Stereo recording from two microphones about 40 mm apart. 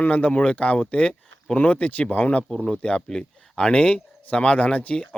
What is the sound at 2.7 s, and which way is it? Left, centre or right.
Speech, left.